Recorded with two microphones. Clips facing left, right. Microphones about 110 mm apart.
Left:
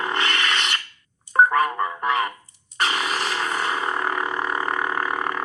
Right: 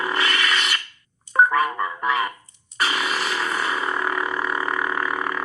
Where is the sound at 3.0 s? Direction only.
Centre (ahead or behind).